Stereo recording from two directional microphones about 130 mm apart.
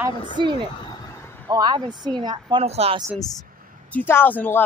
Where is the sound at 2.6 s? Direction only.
50° right (ahead or behind).